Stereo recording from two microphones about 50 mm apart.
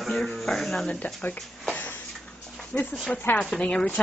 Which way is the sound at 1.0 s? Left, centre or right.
Left.